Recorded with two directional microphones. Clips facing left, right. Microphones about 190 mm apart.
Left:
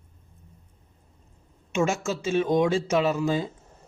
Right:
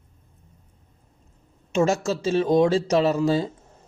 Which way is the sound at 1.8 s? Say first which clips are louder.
Right 4 dB; 35° right (ahead or behind).